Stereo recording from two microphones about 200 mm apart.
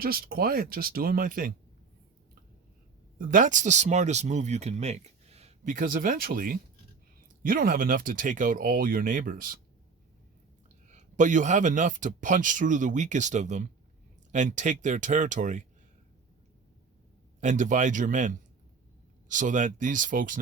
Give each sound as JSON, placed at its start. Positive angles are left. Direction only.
{"t": 0.0, "sound": "speech", "side_deg": -50}
{"t": 3.2, "sound": "speech", "side_deg": -45}
{"t": 10.8, "sound": "speech", "side_deg": -35}
{"t": 17.4, "sound": "speech", "side_deg": -40}
{"t": 19.3, "sound": "speech", "side_deg": -40}